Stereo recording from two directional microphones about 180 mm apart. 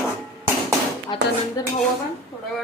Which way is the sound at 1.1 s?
25° left (ahead or behind).